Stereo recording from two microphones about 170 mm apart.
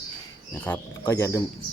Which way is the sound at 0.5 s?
10° left (ahead or behind).